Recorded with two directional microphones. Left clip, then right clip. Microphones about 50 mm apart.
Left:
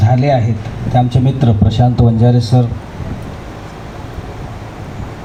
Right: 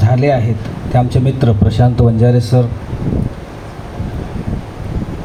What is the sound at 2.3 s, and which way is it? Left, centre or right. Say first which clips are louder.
Speech: right 1 dB; centre.